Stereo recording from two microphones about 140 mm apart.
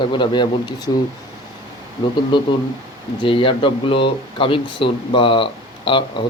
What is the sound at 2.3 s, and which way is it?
Speech, 35° left (ahead or behind).